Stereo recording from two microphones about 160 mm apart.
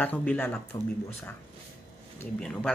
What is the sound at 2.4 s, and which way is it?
Speech, 5° left (ahead or behind).